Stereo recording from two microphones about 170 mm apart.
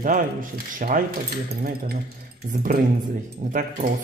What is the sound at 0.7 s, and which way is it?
Speech, 55° right (ahead or behind).